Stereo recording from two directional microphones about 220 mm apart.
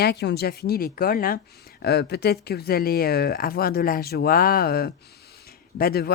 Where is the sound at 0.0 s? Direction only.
50° left (ahead or behind).